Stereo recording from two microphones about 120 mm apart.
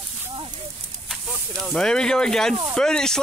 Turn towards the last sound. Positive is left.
turn(degrees=5)  # may be behind; listen again after turning